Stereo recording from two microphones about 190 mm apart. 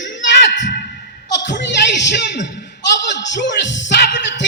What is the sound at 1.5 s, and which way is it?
Music, 65° left (ahead or behind).